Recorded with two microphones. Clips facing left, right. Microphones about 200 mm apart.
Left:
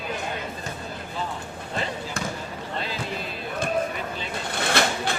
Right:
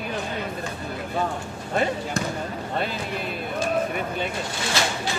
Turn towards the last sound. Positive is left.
turn(degrees=60)  # may be behind; listen again after turning